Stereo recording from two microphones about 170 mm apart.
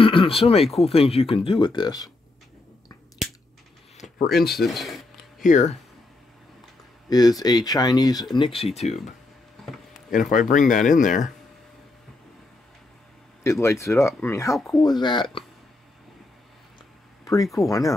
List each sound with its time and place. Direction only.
0.0 s a sound: 30° left (ahead or behind)
0.7 s speech: centre (ahead or behind)
0.9 s speech: 35° left (ahead or behind)
3.2 s crushing: centre (ahead or behind)
4.0 s a sound: 45° left (ahead or behind)
4.4 s speech: centre (ahead or behind)
5.4 s speech: 45° left (ahead or behind)
7.1 s speech: 20° left (ahead or behind)
8.4 s speech: 30° left (ahead or behind)
10.1 s speech: 50° left (ahead or behind)
13.4 s speech: 15° left (ahead or behind)
17.2 s speech: 20° left (ahead or behind)